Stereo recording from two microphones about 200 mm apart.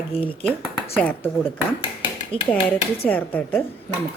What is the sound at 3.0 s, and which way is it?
Speech, 10° left (ahead or behind).